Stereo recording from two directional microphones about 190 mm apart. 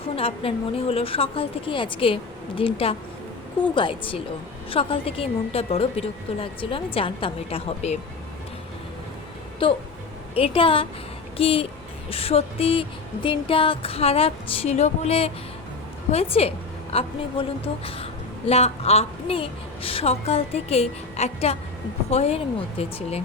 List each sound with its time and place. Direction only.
0.2 s a woman's voice: 30° left (ahead or behind)
9.6 s a woman's voice: 25° left (ahead or behind)